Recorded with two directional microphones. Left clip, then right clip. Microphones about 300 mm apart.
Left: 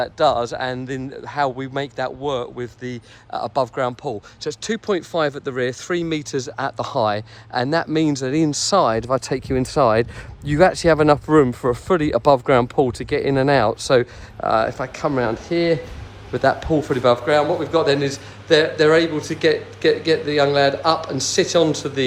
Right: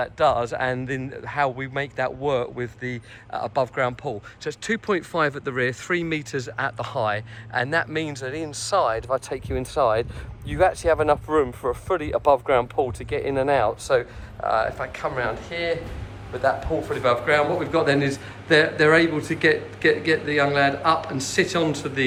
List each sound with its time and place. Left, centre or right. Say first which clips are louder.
0.0 s a man's voice: left 3 dB; centre